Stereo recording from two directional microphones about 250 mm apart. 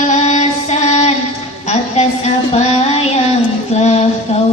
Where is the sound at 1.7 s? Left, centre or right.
Left.